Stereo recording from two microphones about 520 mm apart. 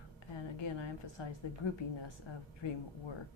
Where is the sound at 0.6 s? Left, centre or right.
Left.